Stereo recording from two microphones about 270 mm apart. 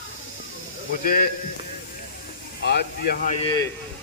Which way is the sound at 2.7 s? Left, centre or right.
Left.